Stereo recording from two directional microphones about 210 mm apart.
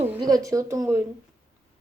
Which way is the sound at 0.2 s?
15° right (ahead or behind).